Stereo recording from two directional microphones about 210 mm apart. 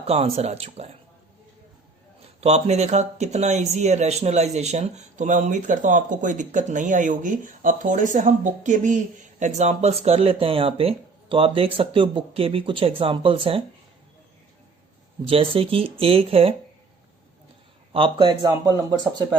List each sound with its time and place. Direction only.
0.0 s speech: 30° right (ahead or behind)
2.4 s speech: 30° right (ahead or behind)
15.3 s speech: 25° right (ahead or behind)
17.9 s speech: 25° right (ahead or behind)